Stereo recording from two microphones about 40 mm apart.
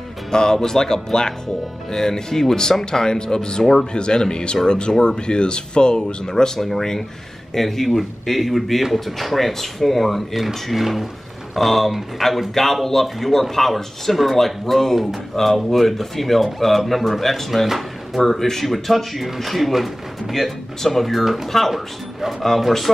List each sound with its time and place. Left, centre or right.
0.3 s speech: centre